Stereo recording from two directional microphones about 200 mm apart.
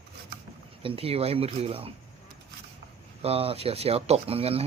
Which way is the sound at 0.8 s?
30° right (ahead or behind).